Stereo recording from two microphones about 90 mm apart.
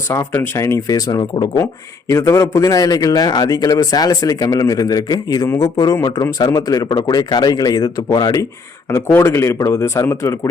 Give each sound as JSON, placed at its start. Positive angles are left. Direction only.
{"t": 0.5, "sound": "a man's voice", "side_deg": 30}
{"t": 0.9, "sound": "a man's voice", "side_deg": 45}
{"t": 2.0, "sound": "a man's voice", "side_deg": 35}
{"t": 9.1, "sound": "a man's voice", "side_deg": 30}